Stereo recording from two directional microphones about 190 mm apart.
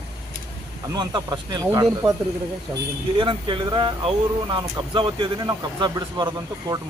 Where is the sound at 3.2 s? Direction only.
25° right (ahead or behind).